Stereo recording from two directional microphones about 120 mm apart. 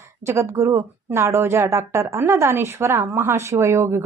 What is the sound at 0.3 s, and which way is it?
A woman's voice, 20° right (ahead or behind).